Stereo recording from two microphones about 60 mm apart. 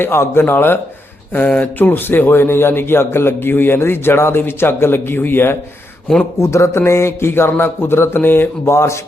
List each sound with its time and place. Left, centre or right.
0.0 s a man's voice: left
1.8 s a man's voice: left
6.4 s a man's voice: left
8.7 s a man's voice: left